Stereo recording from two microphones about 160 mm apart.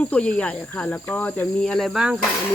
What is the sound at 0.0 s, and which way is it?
Speech, 10° left (ahead or behind).